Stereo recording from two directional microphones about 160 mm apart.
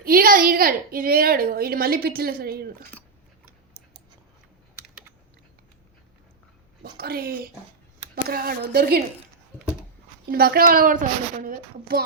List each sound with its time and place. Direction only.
0.0 s a woman's voice: 65° right (ahead or behind)
6.9 s a woman's voice: 75° right (ahead or behind)
10.2 s a woman's voice: 70° right (ahead or behind)